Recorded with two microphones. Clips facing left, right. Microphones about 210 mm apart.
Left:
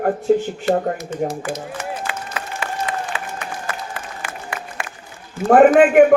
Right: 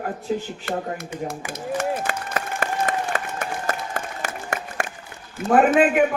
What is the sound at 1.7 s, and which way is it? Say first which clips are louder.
Applause: right 3 dB; 45° right (ahead or behind).